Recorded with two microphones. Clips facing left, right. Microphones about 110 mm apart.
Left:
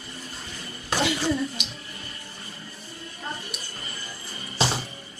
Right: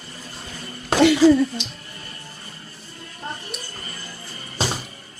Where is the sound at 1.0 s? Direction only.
65° right (ahead or behind).